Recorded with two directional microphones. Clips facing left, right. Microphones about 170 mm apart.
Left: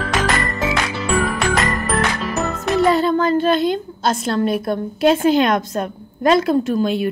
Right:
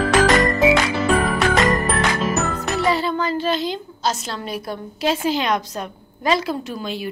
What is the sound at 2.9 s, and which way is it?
A woman's voice, 45° left (ahead or behind).